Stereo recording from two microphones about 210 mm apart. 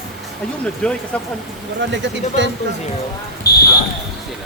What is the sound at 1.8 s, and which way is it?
Speech, 60° right (ahead or behind).